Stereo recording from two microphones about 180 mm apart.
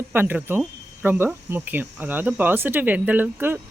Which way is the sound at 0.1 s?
10° right (ahead or behind).